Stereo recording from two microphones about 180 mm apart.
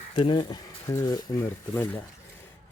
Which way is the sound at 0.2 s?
30° left (ahead or behind).